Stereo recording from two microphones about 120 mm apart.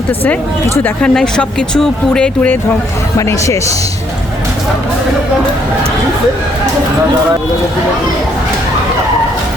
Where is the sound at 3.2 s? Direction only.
25° left (ahead or behind).